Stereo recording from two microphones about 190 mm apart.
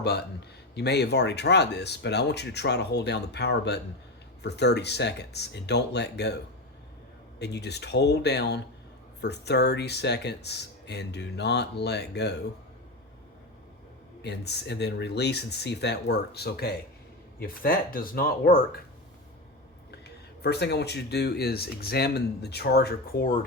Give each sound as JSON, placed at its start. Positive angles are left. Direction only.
{"t": 0.8, "sound": "speech", "side_deg": 60}
{"t": 14.2, "sound": "speech", "side_deg": 60}
{"t": 20.4, "sound": "speech", "side_deg": 60}